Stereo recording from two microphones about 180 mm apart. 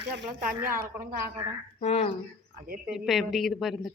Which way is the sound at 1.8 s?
35° left (ahead or behind).